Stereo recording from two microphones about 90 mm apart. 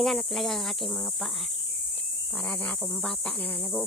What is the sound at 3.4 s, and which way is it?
Cricket, 20° left (ahead or behind).